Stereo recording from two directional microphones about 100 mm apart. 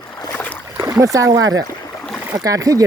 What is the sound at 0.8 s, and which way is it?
Speech, 35° right (ahead or behind).